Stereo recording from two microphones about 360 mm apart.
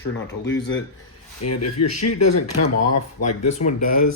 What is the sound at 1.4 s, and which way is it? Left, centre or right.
Speech, left.